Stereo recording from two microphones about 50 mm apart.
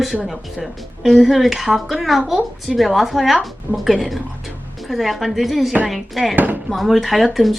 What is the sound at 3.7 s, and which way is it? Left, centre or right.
Speech, right.